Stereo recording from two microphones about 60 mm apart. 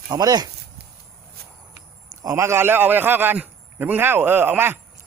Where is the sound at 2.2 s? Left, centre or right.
Right.